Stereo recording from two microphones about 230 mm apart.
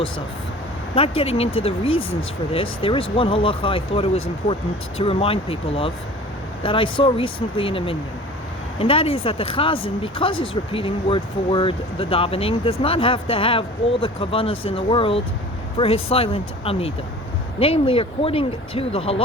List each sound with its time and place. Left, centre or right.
0.9 s speech: left